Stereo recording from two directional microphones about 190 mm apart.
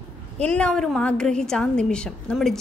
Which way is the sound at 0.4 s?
5° left (ahead or behind).